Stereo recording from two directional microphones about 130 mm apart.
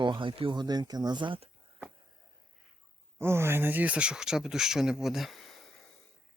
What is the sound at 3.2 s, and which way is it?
Speech, 20° right (ahead or behind).